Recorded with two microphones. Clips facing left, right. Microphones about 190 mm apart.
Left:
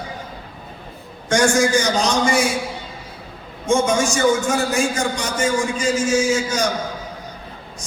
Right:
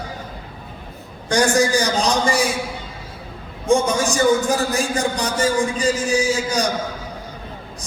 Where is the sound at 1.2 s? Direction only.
35° right (ahead or behind).